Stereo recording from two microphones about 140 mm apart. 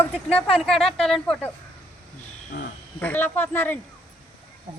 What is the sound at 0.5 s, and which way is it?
Speech, 5° left (ahead or behind).